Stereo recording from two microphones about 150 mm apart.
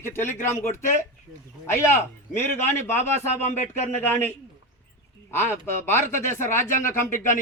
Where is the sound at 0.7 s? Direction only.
60° left (ahead or behind).